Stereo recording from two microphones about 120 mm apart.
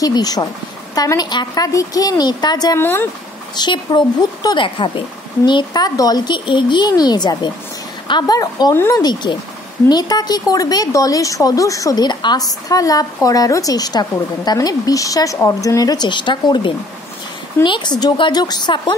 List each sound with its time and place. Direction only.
0.0 s a woman's voice: 35° left (ahead or behind)
2.8 s speech: 20° left (ahead or behind)
3.5 s a woman's voice: 40° left (ahead or behind)
8.7 s speech: 20° left (ahead or behind)
9.0 s a woman's voice: 40° left (ahead or behind)